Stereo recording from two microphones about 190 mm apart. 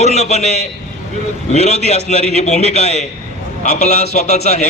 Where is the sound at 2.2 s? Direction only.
35° right (ahead or behind).